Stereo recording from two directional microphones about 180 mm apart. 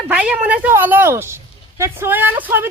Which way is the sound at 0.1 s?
5° right (ahead or behind).